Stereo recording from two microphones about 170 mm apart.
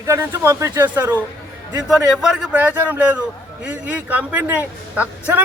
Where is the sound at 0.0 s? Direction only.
20° right (ahead or behind).